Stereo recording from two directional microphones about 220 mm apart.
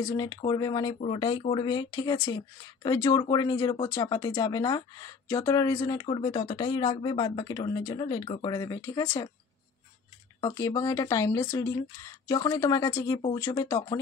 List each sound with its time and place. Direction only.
0.1 s speech: 20° left (ahead or behind)
10.4 s speech: 15° left (ahead or behind)